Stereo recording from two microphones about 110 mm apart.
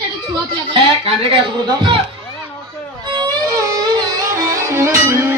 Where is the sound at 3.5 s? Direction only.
30° right (ahead or behind).